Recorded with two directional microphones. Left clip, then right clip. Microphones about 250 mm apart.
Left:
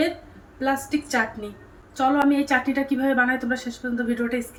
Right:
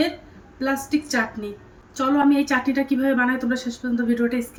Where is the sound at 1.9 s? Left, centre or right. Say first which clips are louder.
Right 1 dB; centre.